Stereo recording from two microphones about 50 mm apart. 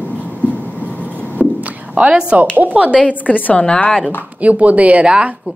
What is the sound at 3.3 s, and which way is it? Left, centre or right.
Speech, left.